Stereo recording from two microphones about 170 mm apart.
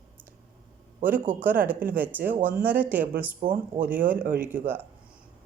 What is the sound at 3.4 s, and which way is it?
Speech, 55° right (ahead or behind).